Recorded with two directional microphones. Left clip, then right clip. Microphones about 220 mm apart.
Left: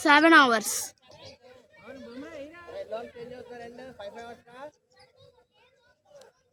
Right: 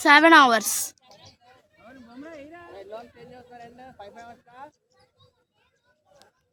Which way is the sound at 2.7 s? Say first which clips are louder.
Left 6 dB; 50° left (ahead or behind).